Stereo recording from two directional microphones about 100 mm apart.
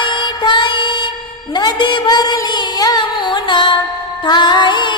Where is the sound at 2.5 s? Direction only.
45° left (ahead or behind).